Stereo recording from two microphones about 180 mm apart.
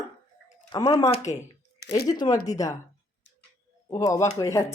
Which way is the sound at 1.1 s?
40° left (ahead or behind).